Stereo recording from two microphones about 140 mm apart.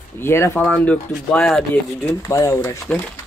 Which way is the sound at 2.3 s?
25° left (ahead or behind).